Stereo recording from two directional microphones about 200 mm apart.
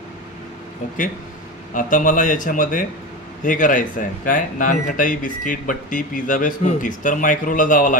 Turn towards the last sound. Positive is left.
turn(degrees=40)  # may be behind; listen again after turning